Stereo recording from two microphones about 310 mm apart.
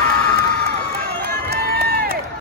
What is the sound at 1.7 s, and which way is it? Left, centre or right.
Run, right.